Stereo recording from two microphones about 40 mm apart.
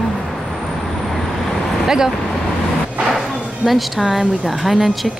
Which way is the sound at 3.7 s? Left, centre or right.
Centre.